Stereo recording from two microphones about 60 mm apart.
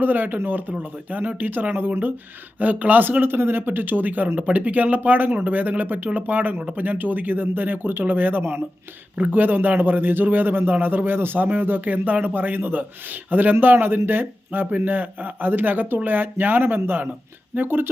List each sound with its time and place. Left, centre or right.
0.0 s a man's voice: right
9.1 s a man's voice: right